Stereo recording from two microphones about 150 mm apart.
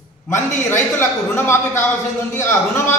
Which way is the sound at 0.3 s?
15° left (ahead or behind).